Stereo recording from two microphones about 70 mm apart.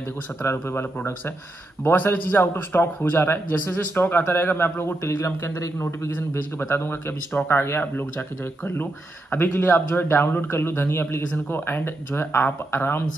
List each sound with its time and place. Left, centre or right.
0.4 s a man's voice: left